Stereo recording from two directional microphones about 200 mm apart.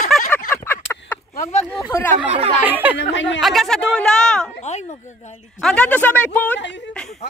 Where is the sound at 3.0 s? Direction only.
65° left (ahead or behind).